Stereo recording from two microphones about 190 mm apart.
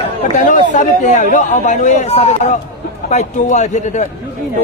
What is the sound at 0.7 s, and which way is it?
Speech, 40° left (ahead or behind).